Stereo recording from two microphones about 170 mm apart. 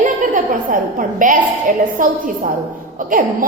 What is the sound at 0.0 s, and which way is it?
A woman's voice, 50° right (ahead or behind).